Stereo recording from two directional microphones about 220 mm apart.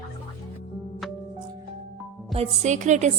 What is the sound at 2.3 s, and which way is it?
Speech, 30° right (ahead or behind).